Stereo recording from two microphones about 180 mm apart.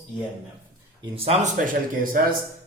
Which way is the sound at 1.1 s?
35° right (ahead or behind).